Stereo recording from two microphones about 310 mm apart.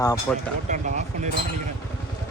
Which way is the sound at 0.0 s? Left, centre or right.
Centre.